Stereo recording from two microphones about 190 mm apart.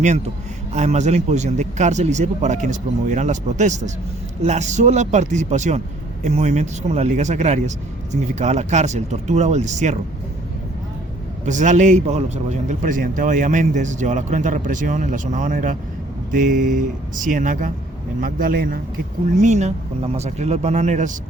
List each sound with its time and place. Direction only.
0.7 s speech: 35° right (ahead or behind)
11.4 s speech: 40° right (ahead or behind)
19.4 s speech: 40° right (ahead or behind)